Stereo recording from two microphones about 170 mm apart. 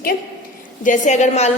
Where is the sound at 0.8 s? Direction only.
45° left (ahead or behind).